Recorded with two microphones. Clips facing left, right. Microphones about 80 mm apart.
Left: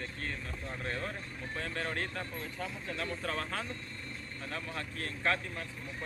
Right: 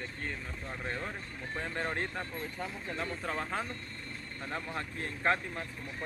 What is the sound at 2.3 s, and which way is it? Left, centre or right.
Speech, centre.